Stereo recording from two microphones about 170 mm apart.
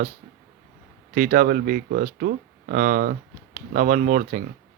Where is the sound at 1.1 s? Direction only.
55° right (ahead or behind).